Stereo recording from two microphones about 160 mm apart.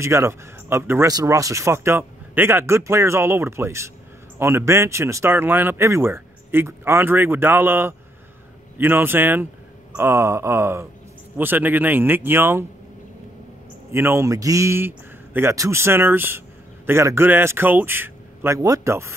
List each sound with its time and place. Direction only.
0.0 s speech: 15° right (ahead or behind)
13.9 s a man's voice: 15° right (ahead or behind)